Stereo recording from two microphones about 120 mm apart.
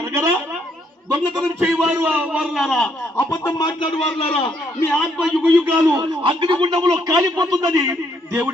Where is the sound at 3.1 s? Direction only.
20° left (ahead or behind).